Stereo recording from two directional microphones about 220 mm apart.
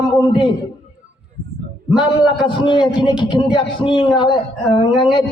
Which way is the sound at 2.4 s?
20° left (ahead or behind).